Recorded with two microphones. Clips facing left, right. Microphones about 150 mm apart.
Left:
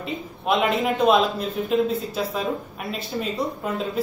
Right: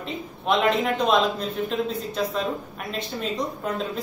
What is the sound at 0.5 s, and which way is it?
Speech, 5° left (ahead or behind).